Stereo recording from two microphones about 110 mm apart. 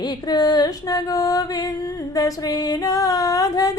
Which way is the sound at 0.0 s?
40° left (ahead or behind).